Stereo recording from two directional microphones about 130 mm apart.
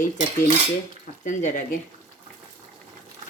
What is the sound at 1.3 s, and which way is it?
Speech, 75° left (ahead or behind).